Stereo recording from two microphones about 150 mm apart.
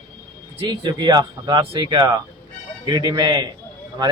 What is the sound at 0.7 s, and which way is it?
A man's voice, 30° right (ahead or behind).